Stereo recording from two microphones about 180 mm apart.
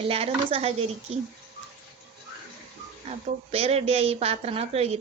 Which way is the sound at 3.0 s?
35° right (ahead or behind).